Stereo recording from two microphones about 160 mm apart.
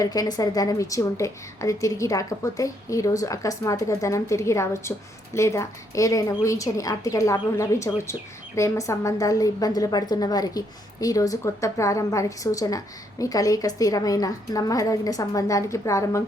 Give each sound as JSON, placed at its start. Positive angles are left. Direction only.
{"t": 0.0, "sound": "a woman's voice", "side_deg": 25}